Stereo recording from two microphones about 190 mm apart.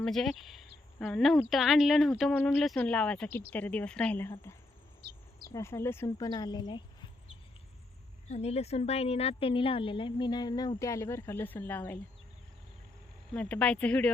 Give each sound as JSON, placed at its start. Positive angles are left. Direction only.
{"t": 0.0, "sound": "a woman's voice", "side_deg": 0}
{"t": 8.3, "sound": "a woman's voice", "side_deg": 35}
{"t": 13.3, "sound": "a woman's voice", "side_deg": 5}